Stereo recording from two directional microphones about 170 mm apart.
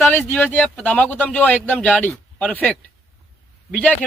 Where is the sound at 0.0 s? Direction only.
10° left (ahead or behind).